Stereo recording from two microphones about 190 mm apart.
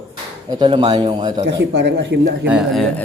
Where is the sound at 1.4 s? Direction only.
65° right (ahead or behind).